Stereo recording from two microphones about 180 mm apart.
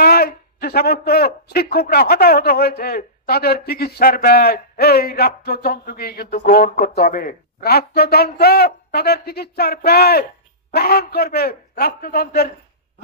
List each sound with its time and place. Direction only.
0.0 s a man's voice: 60° left (ahead or behind)